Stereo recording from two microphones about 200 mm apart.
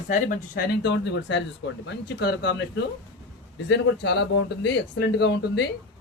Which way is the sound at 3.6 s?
60° left (ahead or behind).